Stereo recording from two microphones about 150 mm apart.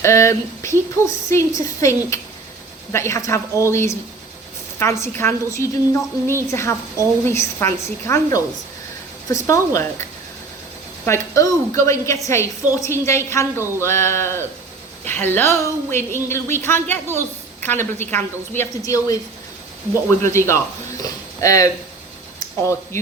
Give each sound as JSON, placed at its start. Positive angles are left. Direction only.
{"t": 0.0, "sound": "a woman's voice", "side_deg": 20}
{"t": 11.0, "sound": "a woman's voice", "side_deg": 20}